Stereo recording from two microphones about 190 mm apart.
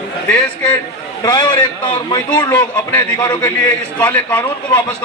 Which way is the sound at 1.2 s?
25° left (ahead or behind).